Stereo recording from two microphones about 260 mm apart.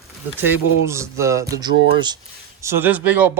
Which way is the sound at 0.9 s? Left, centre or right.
Centre.